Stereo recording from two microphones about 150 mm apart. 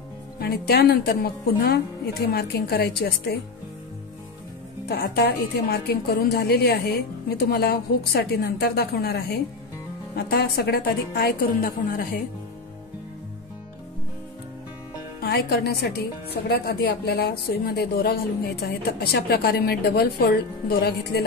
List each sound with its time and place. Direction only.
0.4 s speech: 90° left
4.8 s speech: 90° left; by 12.2 s 70° left (ahead or behind)
15.1 s speech: 90° left